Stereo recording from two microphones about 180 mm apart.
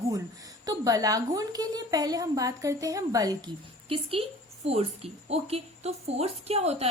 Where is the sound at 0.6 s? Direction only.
20° right (ahead or behind).